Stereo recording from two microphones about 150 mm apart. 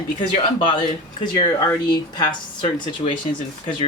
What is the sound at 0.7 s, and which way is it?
A man's voice, 30° left (ahead or behind).